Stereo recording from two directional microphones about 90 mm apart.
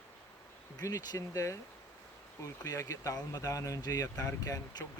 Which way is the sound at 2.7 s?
35° left (ahead or behind).